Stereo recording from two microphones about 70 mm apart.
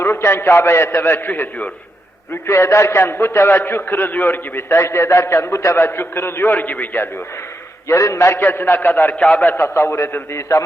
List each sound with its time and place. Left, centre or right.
0.0 s a man's voice: left
2.5 s a man's voice: left
7.9 s a man's voice: left
8.4 s a man's voice: left
9.7 s a man's voice: left